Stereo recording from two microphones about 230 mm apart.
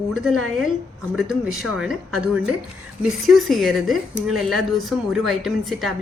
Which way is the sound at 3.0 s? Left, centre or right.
Centre.